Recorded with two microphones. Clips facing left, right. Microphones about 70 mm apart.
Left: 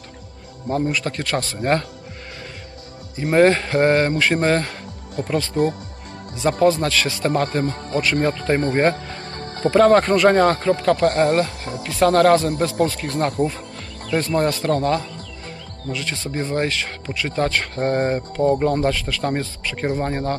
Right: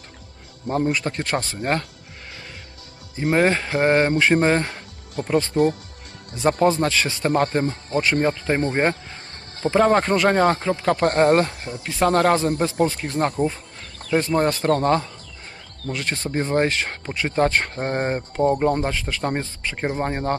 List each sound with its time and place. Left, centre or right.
0.7 s speech: right
3.3 s speech: centre
6.6 s speech: right; by 9.0 s centre
9.3 s music: left
9.6 s speech: centre
11.0 s speech: right
11.9 s speech: centre
13.4 s speech: centre
14.1 s speech: centre